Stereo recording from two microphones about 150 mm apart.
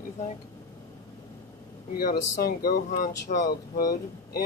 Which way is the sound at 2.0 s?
85° left.